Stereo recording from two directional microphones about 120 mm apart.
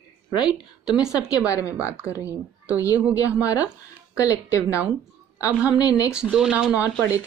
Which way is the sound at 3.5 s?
25° left (ahead or behind).